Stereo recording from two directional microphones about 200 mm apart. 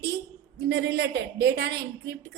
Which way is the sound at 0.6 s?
55° right (ahead or behind).